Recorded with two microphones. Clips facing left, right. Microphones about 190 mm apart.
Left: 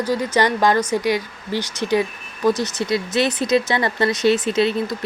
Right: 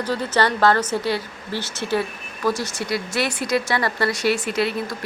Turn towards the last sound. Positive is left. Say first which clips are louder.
# left 4 dB
turn(degrees=20)  # may be behind; listen again after turning